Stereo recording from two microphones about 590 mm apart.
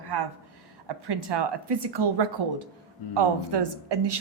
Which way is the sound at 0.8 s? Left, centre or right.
Right.